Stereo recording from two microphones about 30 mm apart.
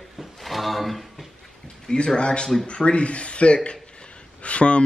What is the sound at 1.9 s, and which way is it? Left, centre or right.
Speech, left.